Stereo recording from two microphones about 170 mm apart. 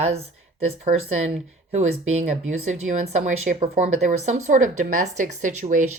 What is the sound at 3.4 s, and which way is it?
Speech, 45° right (ahead or behind).